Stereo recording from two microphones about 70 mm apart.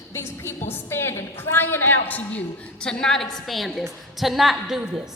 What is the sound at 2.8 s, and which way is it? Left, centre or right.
A woman's voice, centre.